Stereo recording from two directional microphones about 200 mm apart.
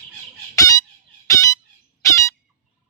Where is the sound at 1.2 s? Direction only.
15° left (ahead or behind).